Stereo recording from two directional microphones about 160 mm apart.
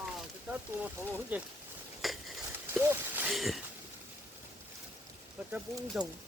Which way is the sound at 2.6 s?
15° right (ahead or behind).